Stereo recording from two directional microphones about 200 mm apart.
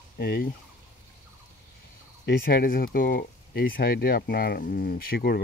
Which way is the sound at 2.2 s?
50° left (ahead or behind).